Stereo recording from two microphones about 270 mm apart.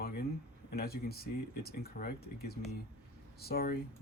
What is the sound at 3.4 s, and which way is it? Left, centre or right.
Speech, left.